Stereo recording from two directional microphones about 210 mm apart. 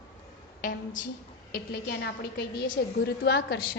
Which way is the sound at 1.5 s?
50° left (ahead or behind).